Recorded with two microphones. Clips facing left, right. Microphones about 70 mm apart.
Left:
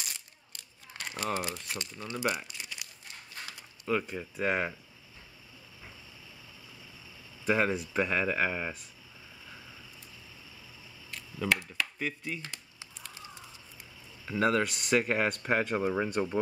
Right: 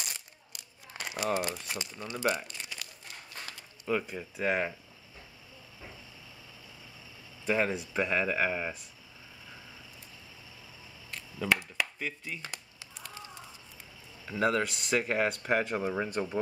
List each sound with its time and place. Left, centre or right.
0.0 s crumpling: centre
2.3 s crumpling: centre
3.8 s speech: centre
7.4 s speech: centre
11.6 s a sound: centre
14.2 s speech: centre